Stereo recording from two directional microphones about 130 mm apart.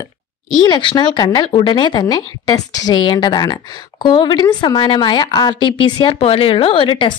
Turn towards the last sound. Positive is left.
turn(degrees=40)  # may be behind; listen again after turning